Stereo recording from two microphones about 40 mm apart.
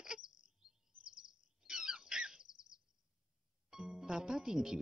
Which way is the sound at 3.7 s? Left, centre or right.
Centre.